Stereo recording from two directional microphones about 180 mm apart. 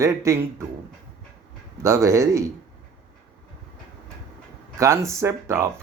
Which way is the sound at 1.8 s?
15° right (ahead or behind).